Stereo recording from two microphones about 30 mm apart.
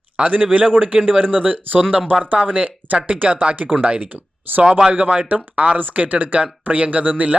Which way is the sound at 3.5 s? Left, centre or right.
Right.